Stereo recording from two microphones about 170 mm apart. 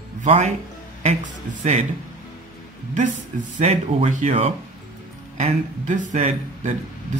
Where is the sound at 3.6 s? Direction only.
40° right (ahead or behind).